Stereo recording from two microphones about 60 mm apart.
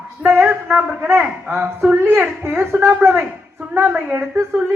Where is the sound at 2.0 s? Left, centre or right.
Right.